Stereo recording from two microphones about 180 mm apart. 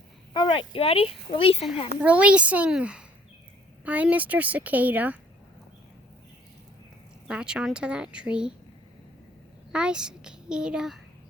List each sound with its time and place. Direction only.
0.3 s speech: 25° left (ahead or behind)
2.0 s a woman's voice: 10° right (ahead or behind)
7.3 s speech: 5° right (ahead or behind)
9.7 s speech: 5° right (ahead or behind)